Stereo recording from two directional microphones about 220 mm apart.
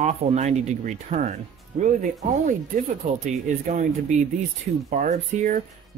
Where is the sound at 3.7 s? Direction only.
35° right (ahead or behind).